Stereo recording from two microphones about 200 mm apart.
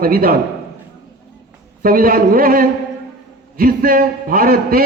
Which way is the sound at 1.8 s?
45° right (ahead or behind).